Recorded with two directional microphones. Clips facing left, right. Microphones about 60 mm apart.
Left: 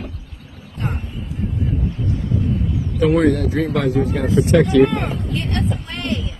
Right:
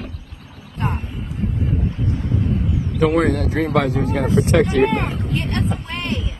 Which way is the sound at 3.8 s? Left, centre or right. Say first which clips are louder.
Left 1 dB; right.